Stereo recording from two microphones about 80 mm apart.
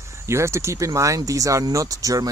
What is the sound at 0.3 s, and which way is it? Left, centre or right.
Speech, right.